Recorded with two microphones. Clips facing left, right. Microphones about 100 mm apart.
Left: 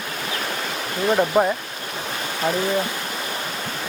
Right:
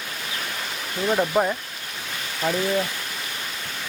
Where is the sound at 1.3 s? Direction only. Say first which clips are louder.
Left 3 dB; 25° left (ahead or behind).